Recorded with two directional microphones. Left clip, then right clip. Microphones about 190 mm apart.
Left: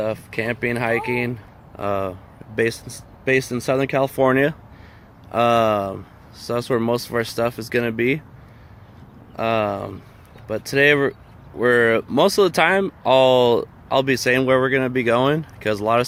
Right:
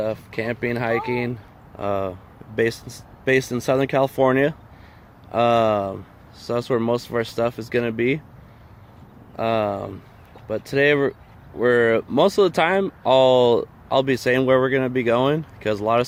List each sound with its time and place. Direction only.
0.0 s speech: 10° right (ahead or behind)
9.3 s speech: 10° right (ahead or behind)